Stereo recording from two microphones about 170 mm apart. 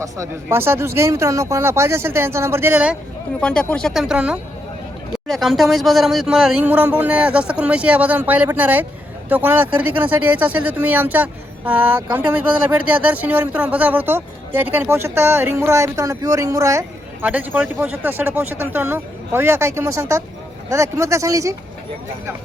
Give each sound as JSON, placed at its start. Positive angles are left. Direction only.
{"t": 0.0, "sound": "speech", "side_deg": -15}
{"t": 3.4, "sound": "speech", "side_deg": 5}